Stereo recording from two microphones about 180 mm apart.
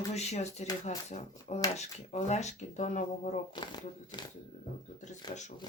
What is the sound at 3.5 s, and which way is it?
Speech, 25° left (ahead or behind).